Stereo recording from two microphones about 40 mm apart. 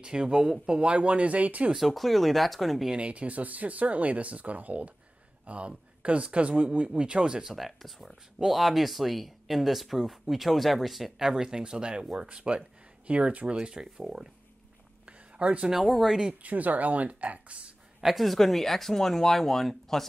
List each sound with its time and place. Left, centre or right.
0.0 s speech: centre; by 1.7 s right
1.8 s speech: centre
3.0 s speech: right
7.5 s speech: centre
11.1 s speech: centre; by 13.6 s right
13.6 s speech: right
15.0 s a sound: right
15.7 s speech: centre
16.4 s speech: right
18.0 s speech: centre